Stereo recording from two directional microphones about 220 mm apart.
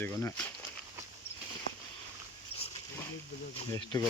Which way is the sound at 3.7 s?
15° left (ahead or behind).